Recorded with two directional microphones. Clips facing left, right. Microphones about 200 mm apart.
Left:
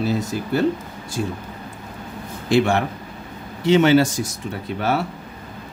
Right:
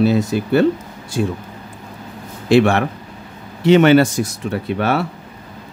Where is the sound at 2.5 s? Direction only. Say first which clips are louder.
Right 5 dB; 70° right (ahead or behind).